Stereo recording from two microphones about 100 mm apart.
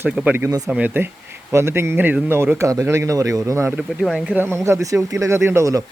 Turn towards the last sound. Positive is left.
turn(degrees=-35)  # may be behind; listen again after turning